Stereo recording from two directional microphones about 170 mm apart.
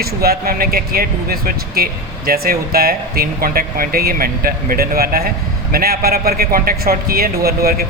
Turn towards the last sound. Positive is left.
turn(degrees=-65)  # may be behind; listen again after turning